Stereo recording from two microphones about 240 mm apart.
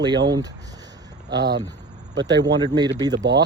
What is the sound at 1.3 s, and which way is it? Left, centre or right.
Speech, right.